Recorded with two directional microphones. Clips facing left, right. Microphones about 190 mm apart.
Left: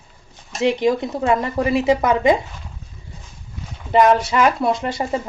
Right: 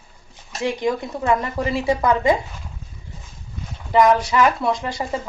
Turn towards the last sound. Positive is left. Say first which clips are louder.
# left 3 dB
turn(degrees=25)  # may be behind; listen again after turning